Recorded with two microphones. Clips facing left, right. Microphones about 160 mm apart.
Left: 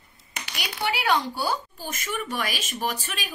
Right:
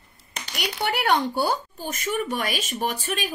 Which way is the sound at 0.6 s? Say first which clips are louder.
Right 3 dB; 60° right (ahead or behind).